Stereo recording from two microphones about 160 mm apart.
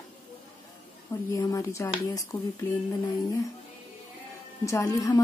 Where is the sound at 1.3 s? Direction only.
20° left (ahead or behind).